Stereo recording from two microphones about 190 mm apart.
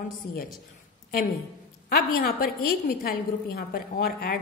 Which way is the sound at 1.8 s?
50° left (ahead or behind).